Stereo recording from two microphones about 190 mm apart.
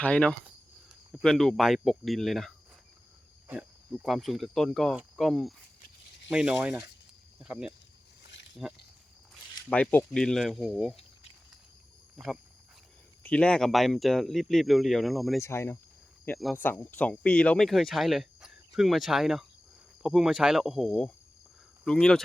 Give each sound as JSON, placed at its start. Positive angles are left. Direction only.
{"t": 0.0, "sound": "speech", "side_deg": 5}
{"t": 9.6, "sound": "speech", "side_deg": 5}
{"t": 12.1, "sound": "speech", "side_deg": 0}
{"t": 15.4, "sound": "speech", "side_deg": 15}